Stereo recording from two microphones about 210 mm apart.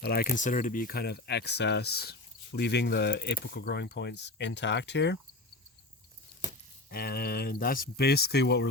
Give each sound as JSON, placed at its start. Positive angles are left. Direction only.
{"t": 0.0, "sound": "speech", "side_deg": 45}
{"t": 6.9, "sound": "speech", "side_deg": 50}